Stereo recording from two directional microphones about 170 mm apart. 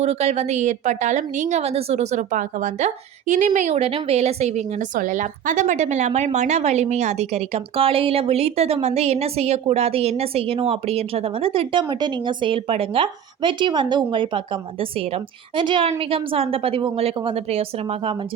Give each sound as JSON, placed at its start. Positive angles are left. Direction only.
{"t": 0.0, "sound": "a woman's voice", "side_deg": -40}